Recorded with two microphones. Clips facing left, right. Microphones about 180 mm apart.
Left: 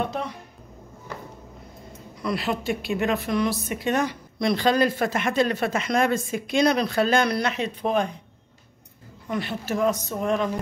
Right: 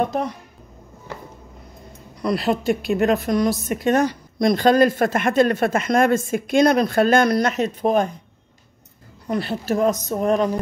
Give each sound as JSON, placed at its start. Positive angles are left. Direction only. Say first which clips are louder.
{"t": 0.0, "sound": "speech", "louder": "right 6 dB", "side_deg": -45}
{"t": 2.2, "sound": "a woman's voice", "louder": "right 6 dB", "side_deg": -40}
{"t": 9.3, "sound": "speech", "louder": "right 5 dB", "side_deg": -35}